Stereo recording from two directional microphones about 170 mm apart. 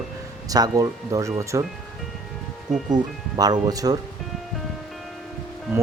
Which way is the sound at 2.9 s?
20° right (ahead or behind).